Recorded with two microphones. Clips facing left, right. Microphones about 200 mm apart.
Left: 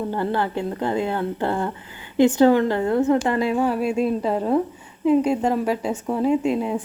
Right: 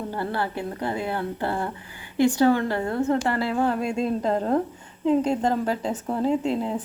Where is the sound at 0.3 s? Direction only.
20° left (ahead or behind).